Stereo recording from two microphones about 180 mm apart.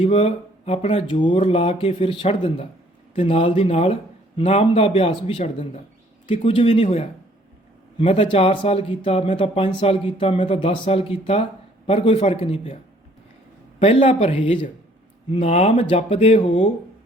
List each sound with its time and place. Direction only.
0.0 s speech: 35° left (ahead or behind)
13.7 s speech: 35° left (ahead or behind)